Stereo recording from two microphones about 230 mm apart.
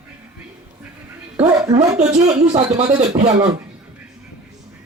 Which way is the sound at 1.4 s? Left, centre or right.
Centre.